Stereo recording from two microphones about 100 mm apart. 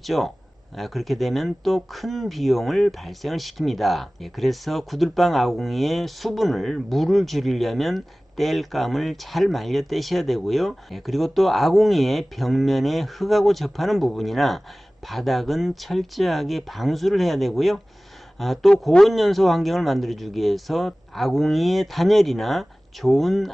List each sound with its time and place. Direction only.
0.0 s speech: centre (ahead or behind)